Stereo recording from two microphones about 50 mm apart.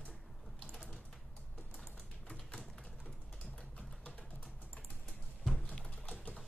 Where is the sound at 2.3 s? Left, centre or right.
Centre.